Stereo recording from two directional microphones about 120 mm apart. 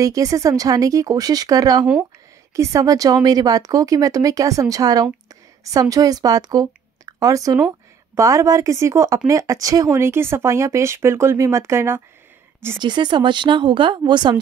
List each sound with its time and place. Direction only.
0.0 s a woman's voice: 30° right (ahead or behind)
12.7 s a woman's voice: 40° right (ahead or behind)